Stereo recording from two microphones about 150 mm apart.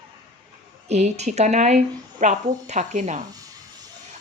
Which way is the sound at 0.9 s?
45° right (ahead or behind).